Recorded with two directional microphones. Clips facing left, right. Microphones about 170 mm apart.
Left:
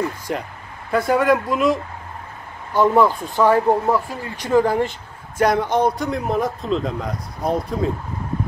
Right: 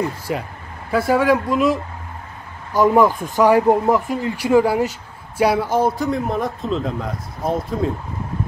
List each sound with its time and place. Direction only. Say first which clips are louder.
0.3 s speech: right 1 dB; 5° right (ahead or behind)
2.7 s speech: right 1 dB; 10° right (ahead or behind)